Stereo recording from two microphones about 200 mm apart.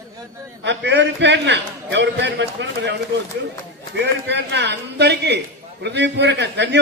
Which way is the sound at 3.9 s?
60° right (ahead or behind).